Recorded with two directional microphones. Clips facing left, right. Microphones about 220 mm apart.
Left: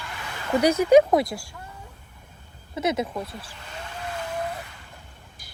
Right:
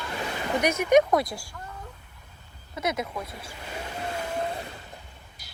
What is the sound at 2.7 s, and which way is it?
Speech, 25° left (ahead or behind).